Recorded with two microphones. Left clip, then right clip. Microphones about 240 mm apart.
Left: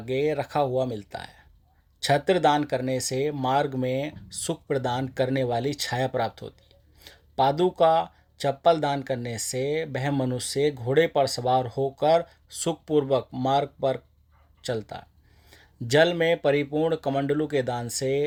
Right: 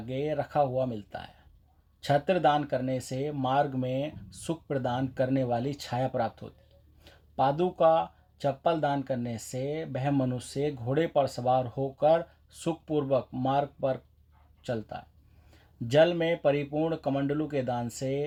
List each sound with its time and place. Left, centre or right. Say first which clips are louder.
0.0 s speech: left 6 dB; left